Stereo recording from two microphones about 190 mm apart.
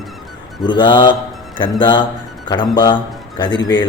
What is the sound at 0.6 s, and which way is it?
A man's voice, 25° left (ahead or behind).